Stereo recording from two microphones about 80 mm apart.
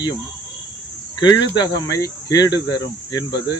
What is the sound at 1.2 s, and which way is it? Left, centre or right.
Speech, left.